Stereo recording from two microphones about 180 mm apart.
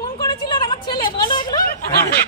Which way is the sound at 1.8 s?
60° left (ahead or behind).